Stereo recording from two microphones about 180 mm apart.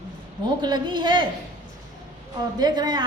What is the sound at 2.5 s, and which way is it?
Speech, 20° right (ahead or behind).